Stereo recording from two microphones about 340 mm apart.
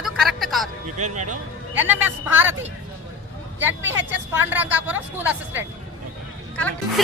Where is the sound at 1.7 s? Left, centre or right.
Centre.